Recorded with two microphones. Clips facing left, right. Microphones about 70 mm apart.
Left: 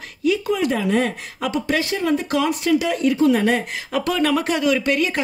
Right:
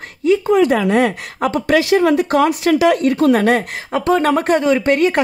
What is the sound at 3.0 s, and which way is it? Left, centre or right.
Speech, right.